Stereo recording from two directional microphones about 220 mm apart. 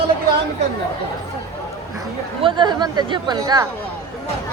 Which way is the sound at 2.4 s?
20° right (ahead or behind).